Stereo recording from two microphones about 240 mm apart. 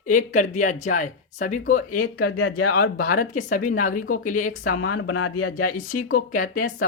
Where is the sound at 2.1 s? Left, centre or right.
Left.